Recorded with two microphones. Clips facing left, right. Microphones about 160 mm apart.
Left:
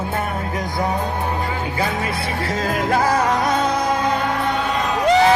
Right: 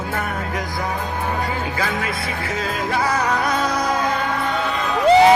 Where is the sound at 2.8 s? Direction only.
45° left (ahead or behind).